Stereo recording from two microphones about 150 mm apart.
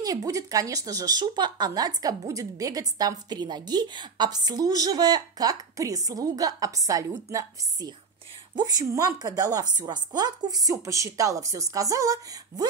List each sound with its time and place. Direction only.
0.0 s speech: 25° right (ahead or behind)